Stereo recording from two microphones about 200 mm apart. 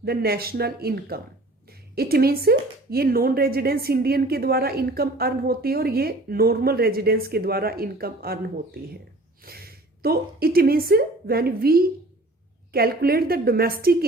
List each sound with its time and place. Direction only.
0.0 s speech: 50° right (ahead or behind)